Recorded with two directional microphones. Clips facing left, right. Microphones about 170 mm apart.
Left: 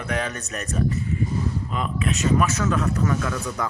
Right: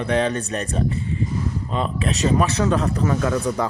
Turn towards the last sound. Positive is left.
turn(degrees=-35)  # may be behind; listen again after turning